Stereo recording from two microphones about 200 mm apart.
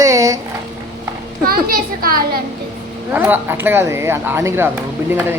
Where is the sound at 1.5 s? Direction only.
45° right (ahead or behind).